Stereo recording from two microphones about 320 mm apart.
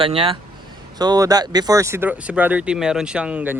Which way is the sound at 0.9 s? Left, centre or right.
Centre.